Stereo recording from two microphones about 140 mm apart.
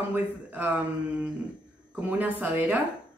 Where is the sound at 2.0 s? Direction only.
10° right (ahead or behind).